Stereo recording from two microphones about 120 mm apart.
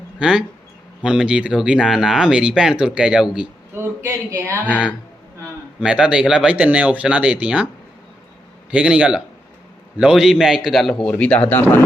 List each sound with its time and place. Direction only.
0.2 s speech: 10° right (ahead or behind)
4.0 s speech: 20° right (ahead or behind)
5.8 s speech: 5° right (ahead or behind)
8.7 s speech: 10° right (ahead or behind); by 11.6 s 15° left (ahead or behind)